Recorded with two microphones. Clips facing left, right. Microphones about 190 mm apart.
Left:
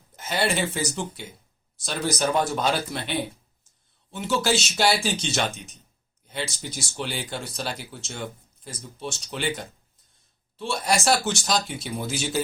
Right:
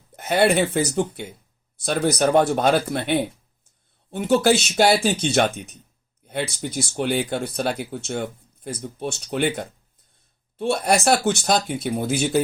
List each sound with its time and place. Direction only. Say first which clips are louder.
0.2 s speech: right 7 dB; 60° right (ahead or behind)